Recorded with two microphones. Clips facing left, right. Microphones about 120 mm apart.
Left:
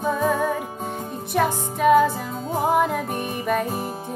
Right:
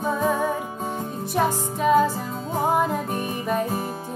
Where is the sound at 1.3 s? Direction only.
65° left (ahead or behind).